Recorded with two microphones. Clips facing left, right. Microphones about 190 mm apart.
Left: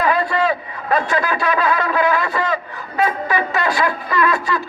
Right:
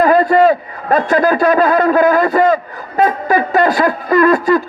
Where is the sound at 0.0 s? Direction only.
45° right (ahead or behind).